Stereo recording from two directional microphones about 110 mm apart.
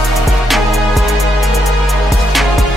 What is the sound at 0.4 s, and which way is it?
Music, centre (ahead or behind).